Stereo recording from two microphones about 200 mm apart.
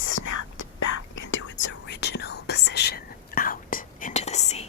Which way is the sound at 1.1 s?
70° left (ahead or behind).